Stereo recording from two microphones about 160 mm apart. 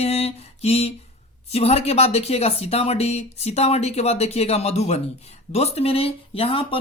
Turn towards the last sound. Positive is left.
turn(degrees=35)  # may be behind; listen again after turning